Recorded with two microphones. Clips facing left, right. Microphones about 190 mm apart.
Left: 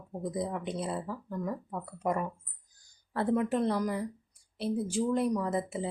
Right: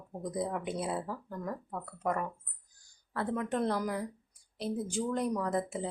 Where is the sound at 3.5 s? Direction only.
Centre (ahead or behind).